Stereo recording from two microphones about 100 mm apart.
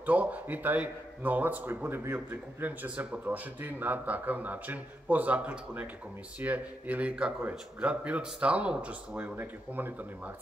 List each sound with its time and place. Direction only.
0.0 s a man's voice: 15° right (ahead or behind)